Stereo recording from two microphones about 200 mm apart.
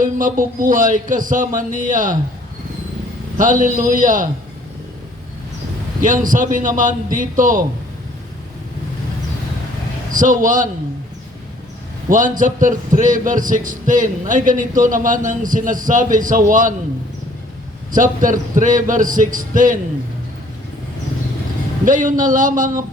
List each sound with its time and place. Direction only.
0.0 s a man's voice: 40° right (ahead or behind)
3.3 s a man's voice: 40° right (ahead or behind)
6.0 s a man's voice: 40° right (ahead or behind)
10.1 s a man's voice: 40° right (ahead or behind)
12.0 s a man's voice: 40° right (ahead or behind)
17.9 s a man's voice: 40° right (ahead or behind)
21.8 s a man's voice: 40° right (ahead or behind)